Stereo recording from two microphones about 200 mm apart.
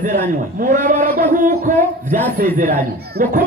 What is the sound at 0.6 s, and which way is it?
Speech, 40° right (ahead or behind).